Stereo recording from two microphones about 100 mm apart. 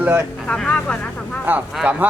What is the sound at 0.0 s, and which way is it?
Speech, 15° right (ahead or behind).